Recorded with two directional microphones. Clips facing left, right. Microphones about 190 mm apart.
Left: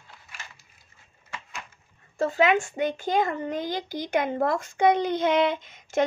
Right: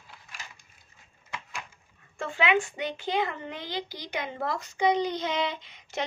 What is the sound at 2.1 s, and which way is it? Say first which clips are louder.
A child's voice: left 5 dB; 40° left (ahead or behind).